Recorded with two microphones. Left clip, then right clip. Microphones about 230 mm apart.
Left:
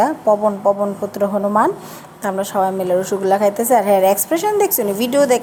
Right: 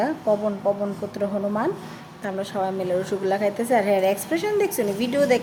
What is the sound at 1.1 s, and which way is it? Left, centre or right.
A woman's voice, centre.